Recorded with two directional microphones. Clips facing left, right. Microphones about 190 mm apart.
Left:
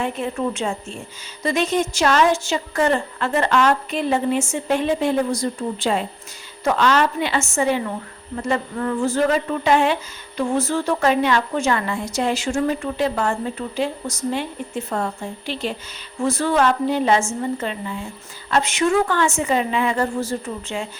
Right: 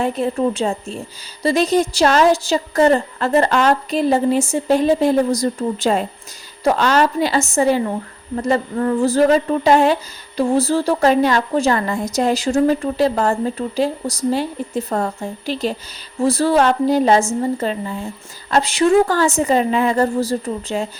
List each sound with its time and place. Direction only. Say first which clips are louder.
0.0 s speech: right 5 dB; 35° right (ahead or behind)